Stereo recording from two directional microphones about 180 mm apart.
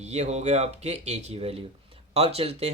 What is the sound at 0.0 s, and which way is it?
Speech, 40° right (ahead or behind).